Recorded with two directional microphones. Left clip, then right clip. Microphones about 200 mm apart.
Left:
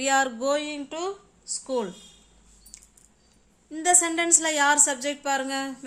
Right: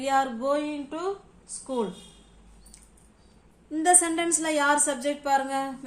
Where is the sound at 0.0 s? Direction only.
45° left (ahead or behind).